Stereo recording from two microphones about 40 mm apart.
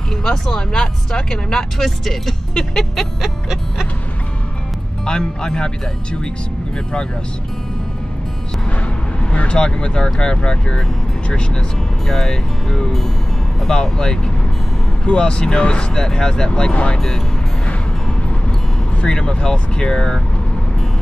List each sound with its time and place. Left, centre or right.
0.2 s speech: centre
2.7 s music: centre
3.2 s music: centre
5.0 s speech: centre
9.2 s speech: left
12.1 s speech: centre
18.9 s speech: left